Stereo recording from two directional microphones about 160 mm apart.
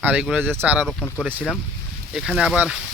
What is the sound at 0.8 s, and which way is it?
Speech, 5° left (ahead or behind).